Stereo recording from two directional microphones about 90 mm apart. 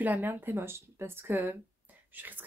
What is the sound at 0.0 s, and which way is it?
Speech, 20° right (ahead or behind).